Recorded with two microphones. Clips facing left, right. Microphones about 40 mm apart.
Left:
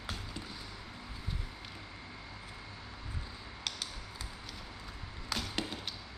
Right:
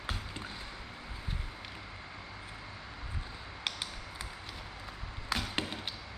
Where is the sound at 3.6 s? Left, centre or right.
Right.